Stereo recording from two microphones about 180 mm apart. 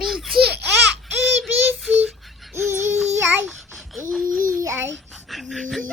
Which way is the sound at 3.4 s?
Centre (ahead or behind).